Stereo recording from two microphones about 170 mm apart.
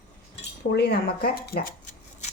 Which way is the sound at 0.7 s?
75° left (ahead or behind).